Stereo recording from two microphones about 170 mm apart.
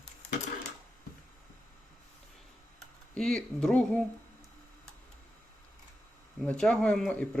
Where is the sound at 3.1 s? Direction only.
5° left (ahead or behind).